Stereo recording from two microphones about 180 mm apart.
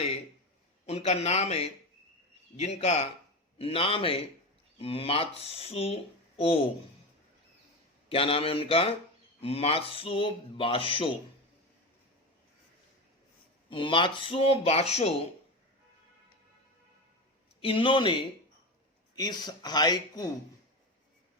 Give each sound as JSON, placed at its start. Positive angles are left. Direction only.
{"t": 0.9, "sound": "speech", "side_deg": 35}
{"t": 8.1, "sound": "speech", "side_deg": 30}
{"t": 13.7, "sound": "speech", "side_deg": 30}
{"t": 17.6, "sound": "speech", "side_deg": 30}